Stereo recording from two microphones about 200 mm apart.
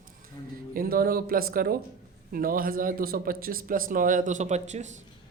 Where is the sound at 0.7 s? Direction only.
50° right (ahead or behind).